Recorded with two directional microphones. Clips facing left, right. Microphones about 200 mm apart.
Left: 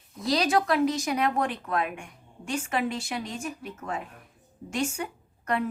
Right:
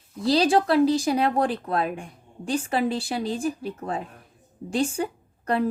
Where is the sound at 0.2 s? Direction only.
30° right (ahead or behind).